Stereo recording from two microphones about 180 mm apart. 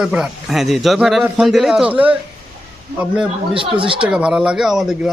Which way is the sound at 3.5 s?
30° right (ahead or behind).